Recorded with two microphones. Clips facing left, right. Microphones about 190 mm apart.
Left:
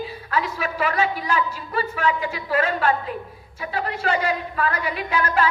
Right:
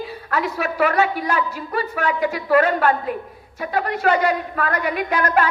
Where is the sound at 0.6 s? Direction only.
45° right (ahead or behind).